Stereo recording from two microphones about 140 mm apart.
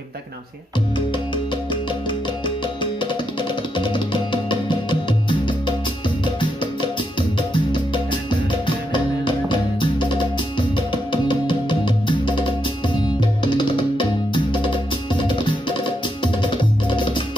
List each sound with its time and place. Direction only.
0.9 s music: 35° left (ahead or behind)